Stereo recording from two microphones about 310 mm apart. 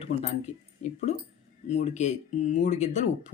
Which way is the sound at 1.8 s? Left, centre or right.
Left.